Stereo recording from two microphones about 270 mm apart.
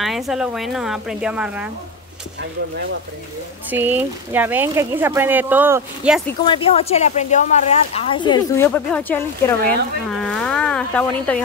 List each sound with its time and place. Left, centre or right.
0.0 s a woman's voice: centre
3.7 s speech: centre
6.4 s speech: centre